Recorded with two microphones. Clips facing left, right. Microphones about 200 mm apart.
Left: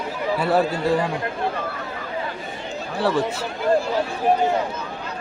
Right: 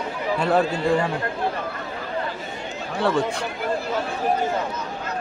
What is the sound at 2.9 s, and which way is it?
Speech, centre (ahead or behind).